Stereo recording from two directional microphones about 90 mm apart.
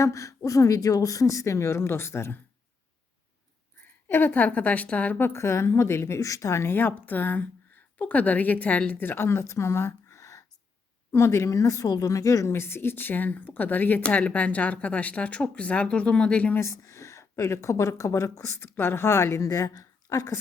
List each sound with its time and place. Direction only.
0.0 s speech: 35° left (ahead or behind)
3.8 s a woman's voice: 25° left (ahead or behind)
16.6 s speech: 35° left (ahead or behind)